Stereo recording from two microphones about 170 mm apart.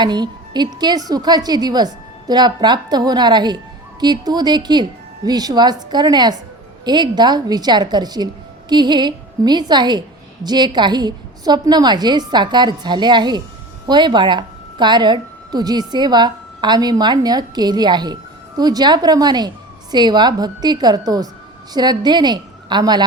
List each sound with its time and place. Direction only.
0.0 s a woman's voice: 25° right (ahead or behind)